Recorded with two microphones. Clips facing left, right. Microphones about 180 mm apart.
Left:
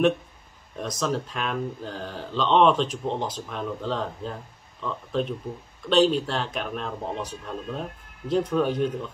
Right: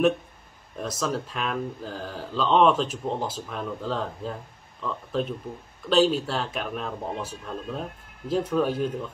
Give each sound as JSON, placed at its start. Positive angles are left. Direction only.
{"t": 0.7, "sound": "speech", "side_deg": 0}